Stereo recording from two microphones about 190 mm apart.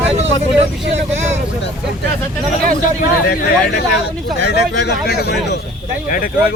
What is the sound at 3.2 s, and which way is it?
Speech, 55° left (ahead or behind).